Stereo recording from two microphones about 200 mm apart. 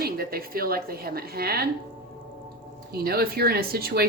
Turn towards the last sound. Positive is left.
turn(degrees=-50)  # may be behind; listen again after turning